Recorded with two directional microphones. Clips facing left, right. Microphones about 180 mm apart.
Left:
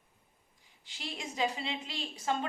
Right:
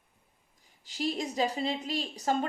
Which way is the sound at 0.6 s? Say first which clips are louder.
Right 12 dB; 40° right (ahead or behind).